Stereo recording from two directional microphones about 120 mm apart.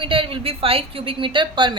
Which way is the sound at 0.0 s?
45° right (ahead or behind).